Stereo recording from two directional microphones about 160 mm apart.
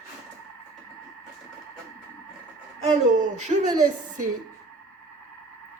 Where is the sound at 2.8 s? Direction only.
50° right (ahead or behind).